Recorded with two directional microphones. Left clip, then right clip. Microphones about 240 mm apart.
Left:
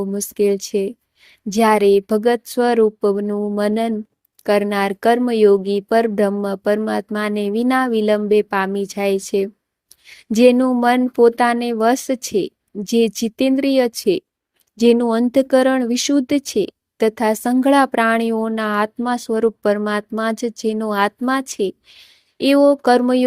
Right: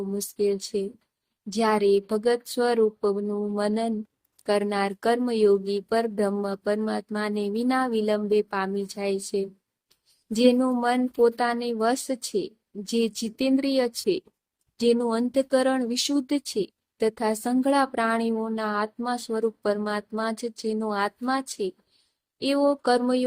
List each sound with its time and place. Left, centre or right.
0.2 s speech: left